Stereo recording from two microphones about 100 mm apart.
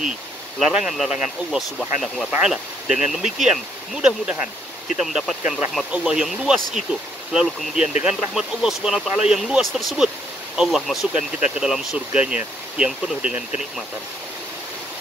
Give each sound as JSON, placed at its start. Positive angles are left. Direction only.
{"t": 0.6, "sound": "speech", "side_deg": -5}